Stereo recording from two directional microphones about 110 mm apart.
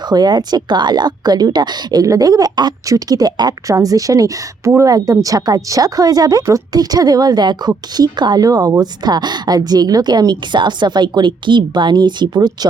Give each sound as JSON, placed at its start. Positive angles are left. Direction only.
{"t": 0.1, "sound": "speech", "side_deg": -40}